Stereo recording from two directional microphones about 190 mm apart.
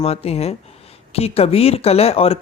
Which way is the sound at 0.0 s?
30° left (ahead or behind).